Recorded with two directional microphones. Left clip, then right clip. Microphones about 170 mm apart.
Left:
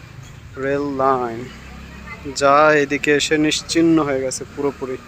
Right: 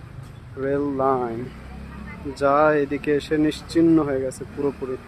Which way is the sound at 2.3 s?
Centre (ahead or behind).